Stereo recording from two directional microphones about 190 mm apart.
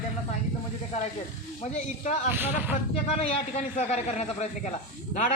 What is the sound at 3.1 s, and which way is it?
A man's voice, 35° left (ahead or behind).